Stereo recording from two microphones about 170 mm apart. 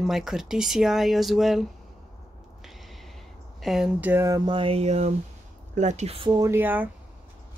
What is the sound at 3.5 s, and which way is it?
Speech, centre (ahead or behind).